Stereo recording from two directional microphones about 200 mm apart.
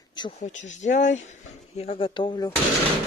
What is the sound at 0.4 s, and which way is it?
Speech, 40° left (ahead or behind).